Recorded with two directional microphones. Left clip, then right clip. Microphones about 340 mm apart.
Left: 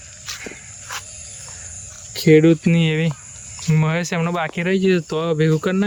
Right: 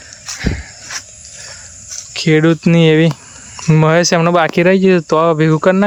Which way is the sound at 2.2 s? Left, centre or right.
Centre.